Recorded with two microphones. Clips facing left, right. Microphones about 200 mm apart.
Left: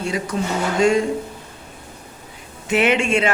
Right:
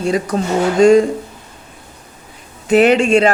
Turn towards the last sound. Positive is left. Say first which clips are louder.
# right 7 dB
turn(degrees=-35)  # may be behind; listen again after turning